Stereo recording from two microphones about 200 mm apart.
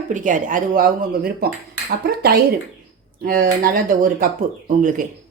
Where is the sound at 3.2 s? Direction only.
45° right (ahead or behind).